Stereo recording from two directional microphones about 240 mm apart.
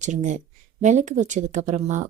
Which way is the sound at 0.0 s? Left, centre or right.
Right.